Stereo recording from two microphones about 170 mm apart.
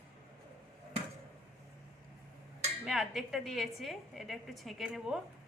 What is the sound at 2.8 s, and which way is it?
A woman's voice, centre (ahead or behind).